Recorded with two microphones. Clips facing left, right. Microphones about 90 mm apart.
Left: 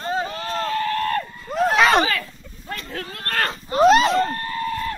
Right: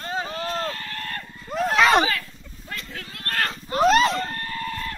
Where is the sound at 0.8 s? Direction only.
90° left.